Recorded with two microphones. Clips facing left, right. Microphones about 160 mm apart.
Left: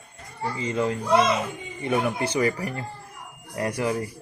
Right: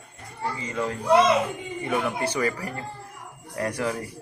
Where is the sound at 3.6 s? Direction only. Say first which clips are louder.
Left 2 dB; 15° left (ahead or behind).